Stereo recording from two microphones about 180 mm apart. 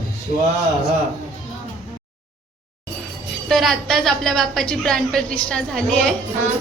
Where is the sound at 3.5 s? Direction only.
Centre (ahead or behind).